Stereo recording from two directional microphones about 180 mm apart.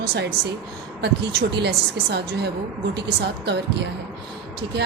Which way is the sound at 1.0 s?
65° right (ahead or behind).